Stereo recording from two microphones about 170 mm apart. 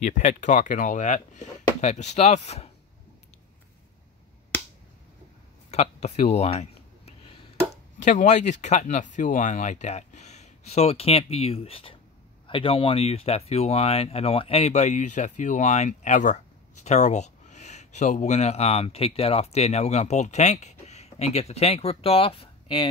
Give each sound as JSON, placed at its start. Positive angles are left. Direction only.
{"t": 0.0, "sound": "speech", "side_deg": 45}
{"t": 5.7, "sound": "a sound", "side_deg": 40}
{"t": 8.0, "sound": "speech", "side_deg": 45}